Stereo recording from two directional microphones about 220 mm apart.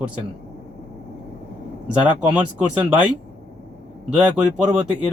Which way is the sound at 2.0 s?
5° right (ahead or behind).